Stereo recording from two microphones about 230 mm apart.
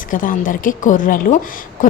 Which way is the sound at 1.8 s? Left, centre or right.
Left.